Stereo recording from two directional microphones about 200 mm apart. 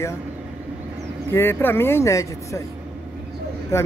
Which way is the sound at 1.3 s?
10° left (ahead or behind).